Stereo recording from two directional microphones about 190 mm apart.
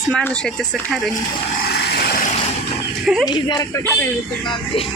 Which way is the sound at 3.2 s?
20° left (ahead or behind).